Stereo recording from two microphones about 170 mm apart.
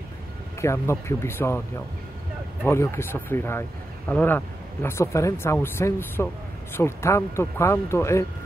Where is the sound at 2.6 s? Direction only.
15° left (ahead or behind).